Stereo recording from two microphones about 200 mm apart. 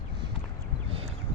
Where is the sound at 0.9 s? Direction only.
30° right (ahead or behind).